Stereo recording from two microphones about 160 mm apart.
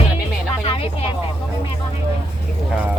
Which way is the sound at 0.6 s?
35° left (ahead or behind).